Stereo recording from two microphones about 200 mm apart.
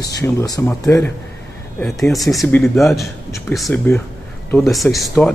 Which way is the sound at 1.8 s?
Centre (ahead or behind).